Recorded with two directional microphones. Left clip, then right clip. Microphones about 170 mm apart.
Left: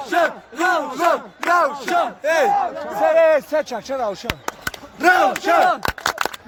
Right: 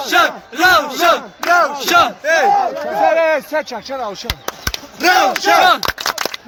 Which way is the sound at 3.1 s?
45° left (ahead or behind).